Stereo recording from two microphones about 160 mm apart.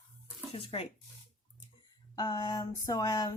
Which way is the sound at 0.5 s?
35° left (ahead or behind).